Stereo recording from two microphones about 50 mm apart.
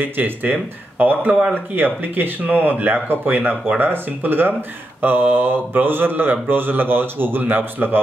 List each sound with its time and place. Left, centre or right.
0.0 s speech: right